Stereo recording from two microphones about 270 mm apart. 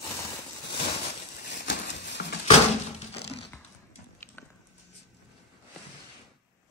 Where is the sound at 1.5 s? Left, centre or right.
Left.